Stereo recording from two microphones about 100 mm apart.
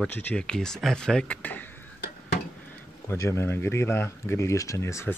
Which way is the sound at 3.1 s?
25° left (ahead or behind).